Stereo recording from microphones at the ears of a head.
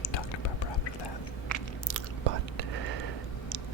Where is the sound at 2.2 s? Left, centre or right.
Right.